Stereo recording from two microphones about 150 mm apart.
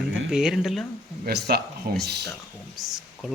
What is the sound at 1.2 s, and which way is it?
Speech, 90° right.